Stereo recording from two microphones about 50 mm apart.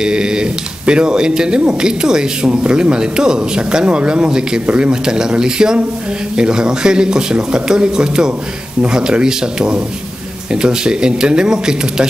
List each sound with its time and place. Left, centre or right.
0.0 s speech: centre